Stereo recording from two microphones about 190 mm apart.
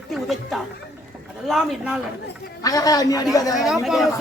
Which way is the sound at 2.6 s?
20° left (ahead or behind).